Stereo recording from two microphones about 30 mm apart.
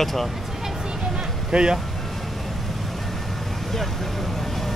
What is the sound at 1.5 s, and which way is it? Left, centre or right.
Speech, right.